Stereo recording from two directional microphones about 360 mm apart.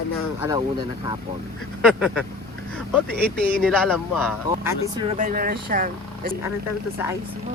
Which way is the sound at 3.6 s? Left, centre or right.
Centre.